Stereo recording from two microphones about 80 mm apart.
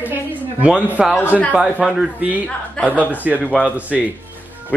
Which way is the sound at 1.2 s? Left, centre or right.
Left.